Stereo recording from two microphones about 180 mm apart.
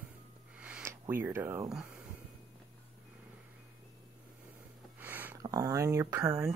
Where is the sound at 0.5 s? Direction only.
5° right (ahead or behind).